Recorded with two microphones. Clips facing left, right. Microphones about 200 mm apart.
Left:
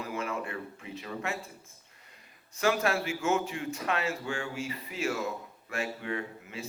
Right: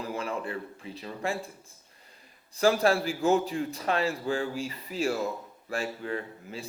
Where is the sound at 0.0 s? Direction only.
35° right (ahead or behind).